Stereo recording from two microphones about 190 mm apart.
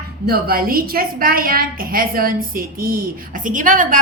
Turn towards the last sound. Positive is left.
turn(degrees=-45)  # may be behind; listen again after turning